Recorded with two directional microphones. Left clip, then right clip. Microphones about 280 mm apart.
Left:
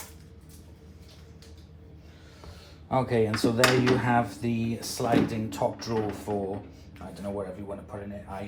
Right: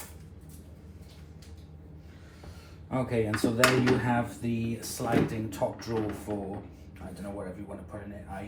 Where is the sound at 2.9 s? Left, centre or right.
Left.